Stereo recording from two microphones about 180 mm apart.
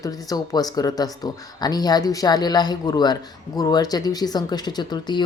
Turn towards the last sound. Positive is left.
turn(degrees=25)  # may be behind; listen again after turning